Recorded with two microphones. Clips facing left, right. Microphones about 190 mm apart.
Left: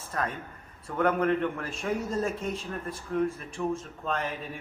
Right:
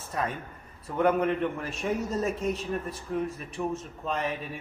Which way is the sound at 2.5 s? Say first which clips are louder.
Right 3 dB; 30° left (ahead or behind).